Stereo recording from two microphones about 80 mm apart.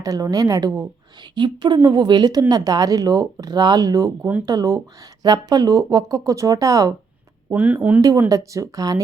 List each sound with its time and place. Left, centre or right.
0.0 s speech: right
1.4 s speech: right
7.6 s speech: centre
8.3 s speech: right